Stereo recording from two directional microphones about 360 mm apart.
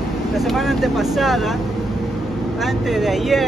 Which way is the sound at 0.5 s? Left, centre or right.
Centre.